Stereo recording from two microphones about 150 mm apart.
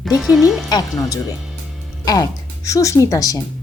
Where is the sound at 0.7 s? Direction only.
25° left (ahead or behind).